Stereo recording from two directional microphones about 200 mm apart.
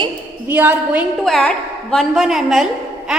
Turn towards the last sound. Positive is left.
turn(degrees=-5)  # may be behind; listen again after turning